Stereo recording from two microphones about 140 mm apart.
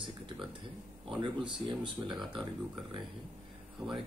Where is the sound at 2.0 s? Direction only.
15° right (ahead or behind).